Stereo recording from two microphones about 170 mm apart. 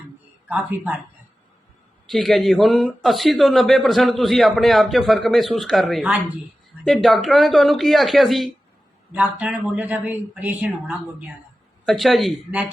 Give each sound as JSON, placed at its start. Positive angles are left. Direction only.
{"t": 0.4, "sound": "speech", "side_deg": -10}
{"t": 2.0, "sound": "speech", "side_deg": 0}